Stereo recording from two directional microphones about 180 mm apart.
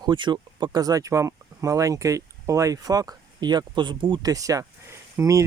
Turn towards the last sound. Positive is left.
turn(degrees=-15)  # may be behind; listen again after turning